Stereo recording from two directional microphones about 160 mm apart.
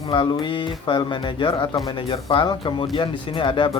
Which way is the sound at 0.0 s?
30° left (ahead or behind).